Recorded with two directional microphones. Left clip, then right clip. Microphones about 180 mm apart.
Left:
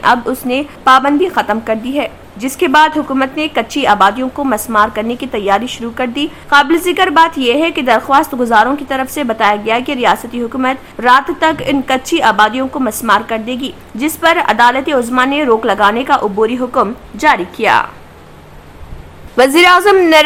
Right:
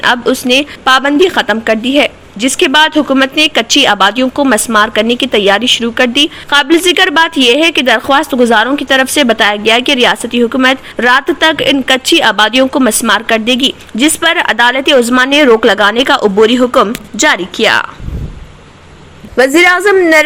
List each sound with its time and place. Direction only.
0.3 s a woman's voice: 20° right (ahead or behind)
19.4 s a woman's voice: centre (ahead or behind)